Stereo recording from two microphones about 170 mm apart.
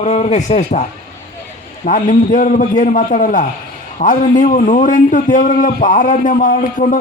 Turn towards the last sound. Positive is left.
turn(degrees=50)  # may be behind; listen again after turning